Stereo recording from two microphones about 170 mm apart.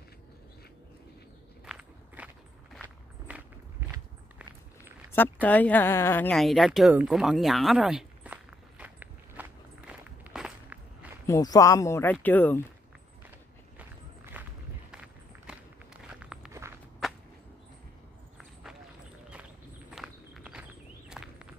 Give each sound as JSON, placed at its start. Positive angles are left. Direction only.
{"t": 1.7, "sound": "walk", "side_deg": -5}
{"t": 3.3, "sound": "walk", "side_deg": -10}
{"t": 5.1, "sound": "a sound", "side_deg": 10}
{"t": 11.2, "sound": "speech", "side_deg": 20}
{"t": 14.3, "sound": "walk", "side_deg": -10}
{"t": 17.0, "sound": "whip", "side_deg": 0}
{"t": 18.4, "sound": "run", "side_deg": -5}
{"t": 19.9, "sound": "walk", "side_deg": -5}